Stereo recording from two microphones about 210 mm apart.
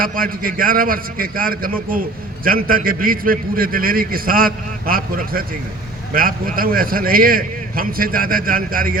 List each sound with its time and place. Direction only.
0.0 s a man's voice: 40° right (ahead or behind)